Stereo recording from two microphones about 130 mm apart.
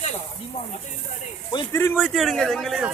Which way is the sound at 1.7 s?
20° left (ahead or behind).